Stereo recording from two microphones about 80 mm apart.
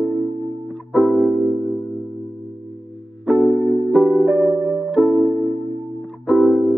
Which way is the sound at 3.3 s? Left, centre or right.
Centre.